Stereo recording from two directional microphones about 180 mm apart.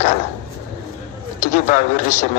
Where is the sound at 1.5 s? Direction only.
45° left (ahead or behind).